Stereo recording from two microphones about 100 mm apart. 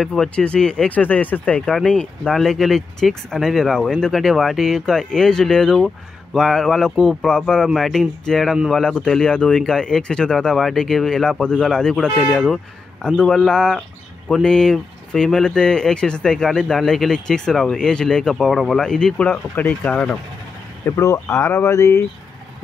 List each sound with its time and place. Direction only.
0.0 s speech: 5° left (ahead or behind)
20.8 s speech: 30° left (ahead or behind)